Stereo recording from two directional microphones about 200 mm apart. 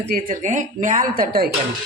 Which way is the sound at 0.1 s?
40° right (ahead or behind).